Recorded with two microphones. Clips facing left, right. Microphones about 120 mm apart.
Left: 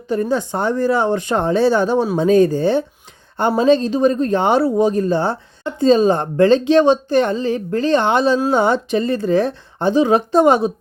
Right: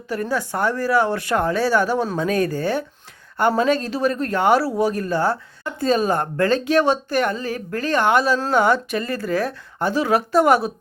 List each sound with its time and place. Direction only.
0.1 s speech: 25° left (ahead or behind)